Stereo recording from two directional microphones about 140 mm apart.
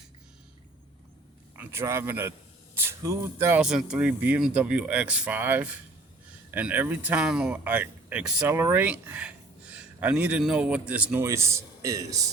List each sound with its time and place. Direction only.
1.5 s speech: 20° right (ahead or behind)
3.6 s speech: 5° right (ahead or behind); by 12.3 s 25° right (ahead or behind)